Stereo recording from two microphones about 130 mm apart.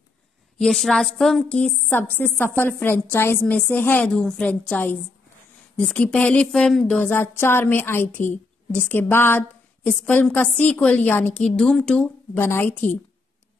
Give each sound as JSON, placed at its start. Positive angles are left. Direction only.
{"t": 0.6, "sound": "a woman's voice", "side_deg": 0}
{"t": 12.4, "sound": "speech", "side_deg": 15}